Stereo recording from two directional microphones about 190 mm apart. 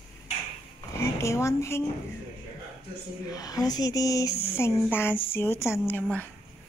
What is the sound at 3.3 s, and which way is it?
A woman's voice, 20° left (ahead or behind).